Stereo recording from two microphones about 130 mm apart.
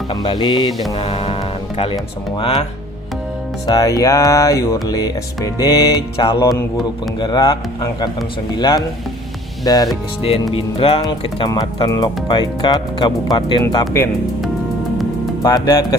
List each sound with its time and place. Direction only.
0.1 s speech: 35° left (ahead or behind)
0.9 s speech: 50° left (ahead or behind)
3.7 s music: 30° left (ahead or behind)
7.2 s speech: 35° left (ahead or behind)
9.6 s music: 30° left (ahead or behind)
10.5 s music: 45° left (ahead or behind)
11.4 s speech: 30° left (ahead or behind)
15.4 s music: 30° left (ahead or behind)